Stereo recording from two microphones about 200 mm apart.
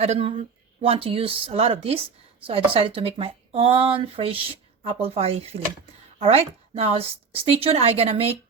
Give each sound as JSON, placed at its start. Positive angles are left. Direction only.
{"t": 0.0, "sound": "a woman's voice", "side_deg": -30}